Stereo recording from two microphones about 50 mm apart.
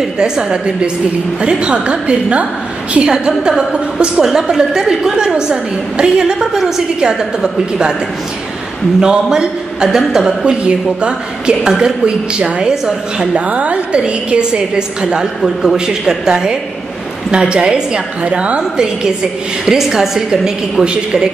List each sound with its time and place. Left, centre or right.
0.0 s a woman's voice: centre
9.0 s a woman's voice: centre
10.4 s a woman's voice: centre
18.6 s a woman's voice: centre